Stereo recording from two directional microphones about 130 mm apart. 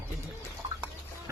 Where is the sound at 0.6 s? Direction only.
40° right (ahead or behind).